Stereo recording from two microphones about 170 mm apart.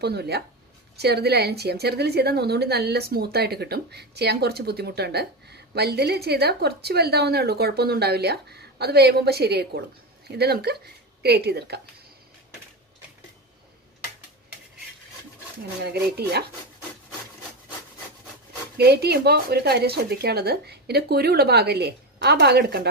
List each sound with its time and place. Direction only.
0.0 s a woman's voice: 70° right (ahead or behind)
15.8 s a woman's voice: 70° right (ahead or behind)
18.8 s a woman's voice: 70° right (ahead or behind)